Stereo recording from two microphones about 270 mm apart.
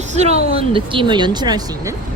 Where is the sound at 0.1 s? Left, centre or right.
Right.